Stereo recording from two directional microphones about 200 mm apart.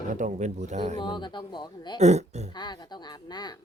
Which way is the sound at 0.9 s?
20° left (ahead or behind).